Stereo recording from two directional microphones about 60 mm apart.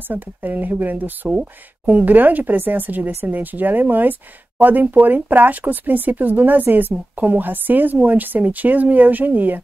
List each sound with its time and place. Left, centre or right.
0.1 s speech: right